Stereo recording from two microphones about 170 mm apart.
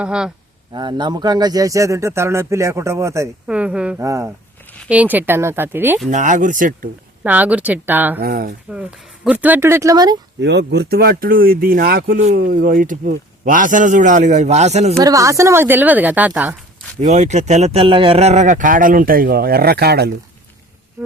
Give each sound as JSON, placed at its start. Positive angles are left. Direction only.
{"t": 0.0, "sound": "speech", "side_deg": -5}
{"t": 0.7, "sound": "speech", "side_deg": -25}
{"t": 3.4, "sound": "a woman's voice", "side_deg": -5}
{"t": 4.0, "sound": "a woman's voice", "side_deg": -20}
{"t": 6.1, "sound": "speech", "side_deg": -45}
{"t": 7.3, "sound": "a woman's voice", "side_deg": -10}
{"t": 8.2, "sound": "speech", "side_deg": -65}
{"t": 8.7, "sound": "a woman's voice", "side_deg": -5}
{"t": 10.4, "sound": "speech", "side_deg": -85}
{"t": 14.9, "sound": "a woman's voice", "side_deg": -20}
{"t": 17.0, "sound": "speech", "side_deg": -45}